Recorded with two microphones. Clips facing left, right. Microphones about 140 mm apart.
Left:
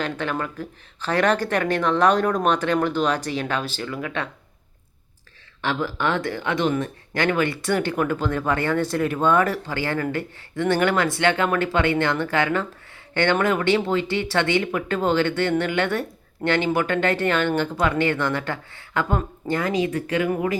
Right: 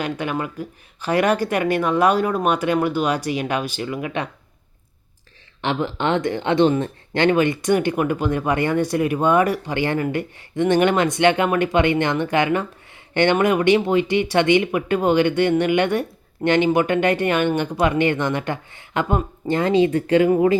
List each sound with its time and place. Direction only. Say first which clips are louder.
0.0 s speech: right 2 dB; 15° right (ahead or behind)
5.6 s speech: right 2 dB; 20° right (ahead or behind)